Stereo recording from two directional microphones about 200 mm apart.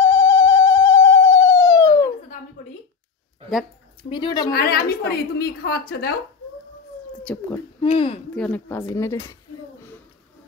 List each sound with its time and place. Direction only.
0.1 s music: 15° left (ahead or behind)
1.4 s a sound: 15° left (ahead or behind)
4.1 s speech: 20° left (ahead or behind)
4.5 s a woman's voice: 50° left (ahead or behind)
7.2 s speech: 10° left (ahead or behind)
7.8 s speech: 25° left (ahead or behind)
8.4 s speech: 10° left (ahead or behind)